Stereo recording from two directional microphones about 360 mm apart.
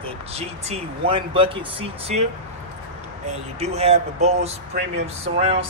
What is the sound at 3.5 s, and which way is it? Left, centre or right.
Speech, centre.